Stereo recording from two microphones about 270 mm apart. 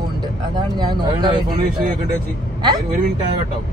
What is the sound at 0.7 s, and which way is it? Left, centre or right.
Speech, centre.